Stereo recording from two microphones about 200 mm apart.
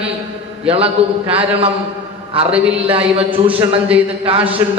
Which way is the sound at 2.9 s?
30° right (ahead or behind).